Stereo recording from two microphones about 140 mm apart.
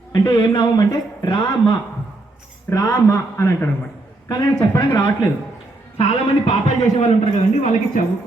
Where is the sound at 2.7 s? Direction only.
20° left (ahead or behind).